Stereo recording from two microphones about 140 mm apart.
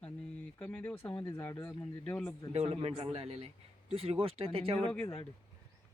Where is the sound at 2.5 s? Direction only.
45° right (ahead or behind).